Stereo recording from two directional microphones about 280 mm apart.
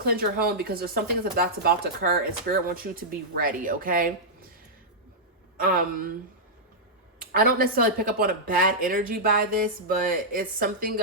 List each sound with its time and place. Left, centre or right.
0.0 s speech: right
5.5 s speech: right
7.3 s speech: right